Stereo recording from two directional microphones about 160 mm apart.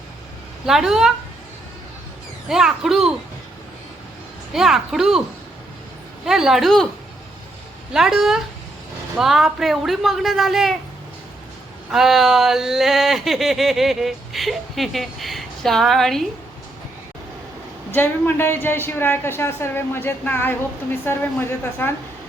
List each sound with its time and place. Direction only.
0.6 s speech: 5° right (ahead or behind)
2.5 s speech: 5° right (ahead or behind)
4.5 s speech: centre (ahead or behind)
6.2 s speech: centre (ahead or behind)
7.9 s speech: 5° right (ahead or behind)
11.9 s speech: centre (ahead or behind)
17.9 s a woman's voice: 15° left (ahead or behind)